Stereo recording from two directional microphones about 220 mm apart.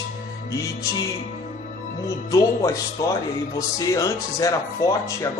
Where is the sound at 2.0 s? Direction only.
15° left (ahead or behind).